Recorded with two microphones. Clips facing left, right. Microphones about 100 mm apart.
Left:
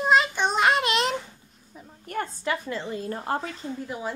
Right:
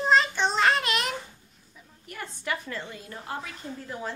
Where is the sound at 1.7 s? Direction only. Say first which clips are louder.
Left 11 dB; 45° left (ahead or behind).